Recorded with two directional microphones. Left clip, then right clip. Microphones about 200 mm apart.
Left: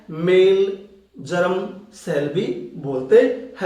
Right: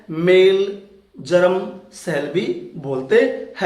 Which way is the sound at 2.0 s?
20° right (ahead or behind).